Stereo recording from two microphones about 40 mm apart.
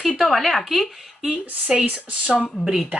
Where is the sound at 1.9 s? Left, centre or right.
Right.